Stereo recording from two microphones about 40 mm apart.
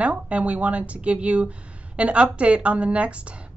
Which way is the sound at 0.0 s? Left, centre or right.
Right.